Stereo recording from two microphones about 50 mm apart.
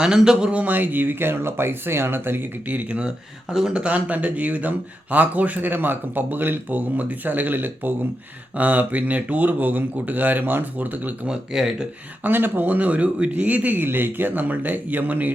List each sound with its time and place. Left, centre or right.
0.0 s speech: centre
0.5 s speech: right
2.6 s speech: right
3.5 s speech: centre
3.8 s speech: right
11.3 s speech: centre
12.2 s speech: right
13.8 s speech: right